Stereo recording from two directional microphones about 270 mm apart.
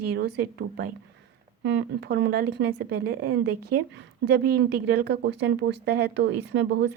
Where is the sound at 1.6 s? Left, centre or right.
Right.